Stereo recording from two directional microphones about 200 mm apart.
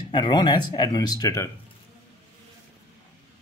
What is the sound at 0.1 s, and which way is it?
Speech, 25° left (ahead or behind).